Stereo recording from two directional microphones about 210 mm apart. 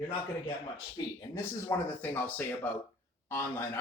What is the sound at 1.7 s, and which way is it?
Speech, 15° left (ahead or behind).